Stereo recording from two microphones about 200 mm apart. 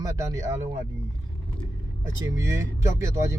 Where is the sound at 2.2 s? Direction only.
15° right (ahead or behind).